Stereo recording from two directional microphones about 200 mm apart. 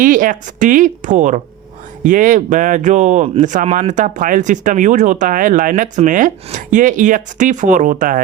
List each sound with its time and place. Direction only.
0.0 s speech: 40° right (ahead or behind)